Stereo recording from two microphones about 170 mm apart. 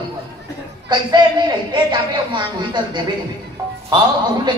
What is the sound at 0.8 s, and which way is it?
A man's voice, 25° right (ahead or behind).